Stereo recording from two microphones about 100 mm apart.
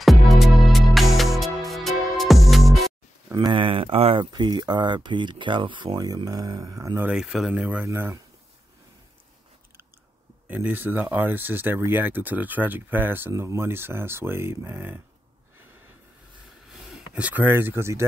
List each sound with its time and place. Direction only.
0.0 s music: centre (ahead or behind)
3.3 s speech: 55° right (ahead or behind)
4.3 s speech: 50° right (ahead or behind)
7.0 s speech: 10° right (ahead or behind)
10.5 s speech: 20° right (ahead or behind)
16.8 s speech: 10° right (ahead or behind); by 18.0 s 25° right (ahead or behind)